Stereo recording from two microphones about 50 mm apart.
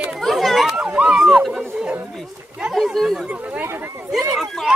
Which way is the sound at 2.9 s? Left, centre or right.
Centre.